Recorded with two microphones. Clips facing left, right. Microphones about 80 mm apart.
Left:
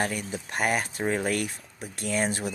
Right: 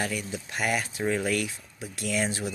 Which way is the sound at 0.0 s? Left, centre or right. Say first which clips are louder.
Left 2 dB; left.